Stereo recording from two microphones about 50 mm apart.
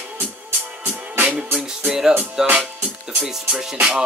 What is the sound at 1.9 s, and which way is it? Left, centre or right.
Speech, centre.